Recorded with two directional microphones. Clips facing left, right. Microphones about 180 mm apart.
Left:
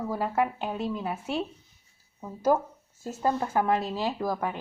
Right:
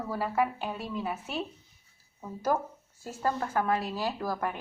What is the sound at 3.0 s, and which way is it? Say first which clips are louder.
Speech: left 3 dB; 20° left (ahead or behind).